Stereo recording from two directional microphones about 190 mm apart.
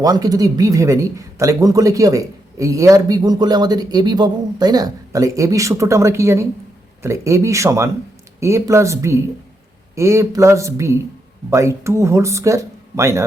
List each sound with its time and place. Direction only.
0.0 s speech: 20° right (ahead or behind)